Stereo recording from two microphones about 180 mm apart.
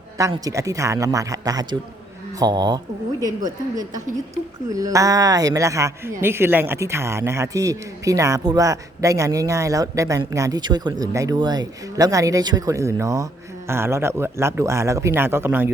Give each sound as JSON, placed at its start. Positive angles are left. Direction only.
{"t": 0.2, "sound": "speech", "side_deg": -20}